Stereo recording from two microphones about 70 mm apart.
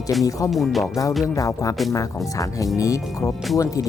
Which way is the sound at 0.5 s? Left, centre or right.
Centre.